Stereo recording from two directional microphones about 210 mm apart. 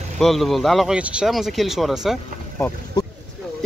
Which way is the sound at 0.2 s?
Centre (ahead or behind).